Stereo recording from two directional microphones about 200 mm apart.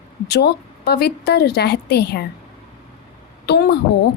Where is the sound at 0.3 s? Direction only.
55° left (ahead or behind).